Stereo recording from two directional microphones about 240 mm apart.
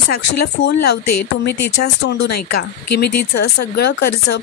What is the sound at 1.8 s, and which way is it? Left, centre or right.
Speech, left.